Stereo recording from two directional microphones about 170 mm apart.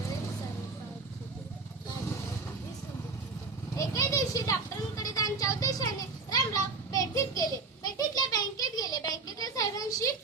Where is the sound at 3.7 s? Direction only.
20° left (ahead or behind).